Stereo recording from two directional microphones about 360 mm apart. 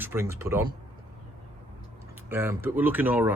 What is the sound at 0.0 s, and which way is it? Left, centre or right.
Speech, centre.